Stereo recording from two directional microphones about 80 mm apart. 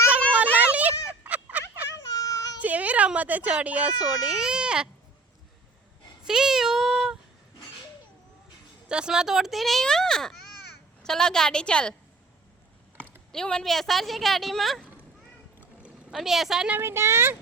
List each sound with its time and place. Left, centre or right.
0.1 s a sound: centre
2.0 s child singing: left
2.6 s speech: centre
6.2 s meow: centre
8.9 s a child's voice: centre
13.3 s a child's voice: centre
15.8 s boat: centre
16.2 s a child's voice: centre
16.8 s speech: right